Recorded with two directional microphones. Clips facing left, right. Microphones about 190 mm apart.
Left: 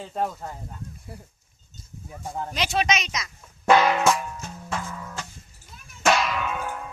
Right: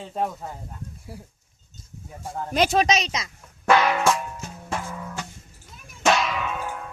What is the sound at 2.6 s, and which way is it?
Speech, 45° right (ahead or behind).